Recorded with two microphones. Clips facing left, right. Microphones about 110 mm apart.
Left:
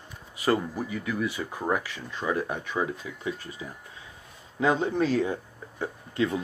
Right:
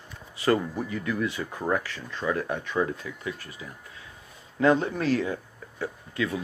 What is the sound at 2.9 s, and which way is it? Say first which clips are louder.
Speech: left 1 dB; 20° left (ahead or behind).